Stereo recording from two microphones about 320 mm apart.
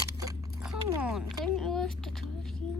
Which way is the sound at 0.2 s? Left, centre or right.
Centre.